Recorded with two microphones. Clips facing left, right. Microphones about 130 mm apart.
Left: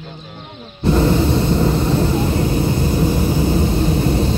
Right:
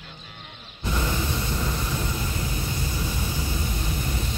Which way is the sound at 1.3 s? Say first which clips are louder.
Left 13 dB; 65° left (ahead or behind).